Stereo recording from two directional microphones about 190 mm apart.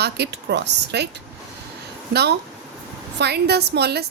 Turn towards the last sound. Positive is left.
turn(degrees=-60)  # may be behind; listen again after turning